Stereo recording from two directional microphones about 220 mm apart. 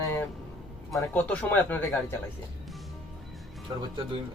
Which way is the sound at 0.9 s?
5° left (ahead or behind).